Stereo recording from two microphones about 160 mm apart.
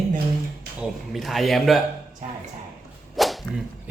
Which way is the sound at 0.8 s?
Centre (ahead or behind).